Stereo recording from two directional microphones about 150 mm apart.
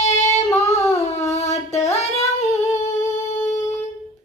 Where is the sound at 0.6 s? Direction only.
45° left (ahead or behind).